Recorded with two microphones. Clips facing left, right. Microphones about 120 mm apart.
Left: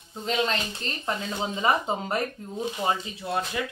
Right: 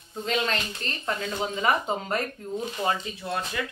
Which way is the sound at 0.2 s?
20° left (ahead or behind).